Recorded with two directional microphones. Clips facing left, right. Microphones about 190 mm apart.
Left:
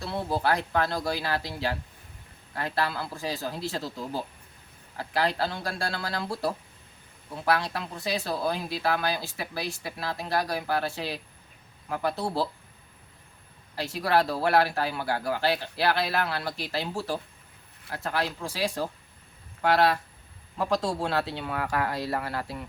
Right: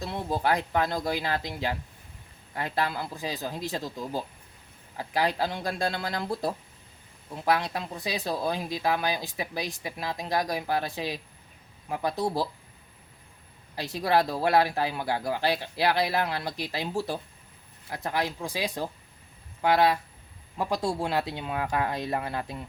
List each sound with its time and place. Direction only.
0.0 s speech: 15° right (ahead or behind)
13.7 s speech: 15° right (ahead or behind)